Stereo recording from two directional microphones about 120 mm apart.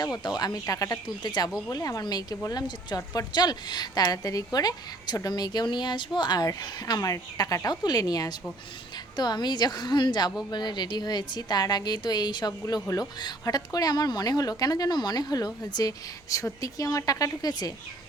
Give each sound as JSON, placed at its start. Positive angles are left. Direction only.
{"t": 0.0, "sound": "speech", "side_deg": 35}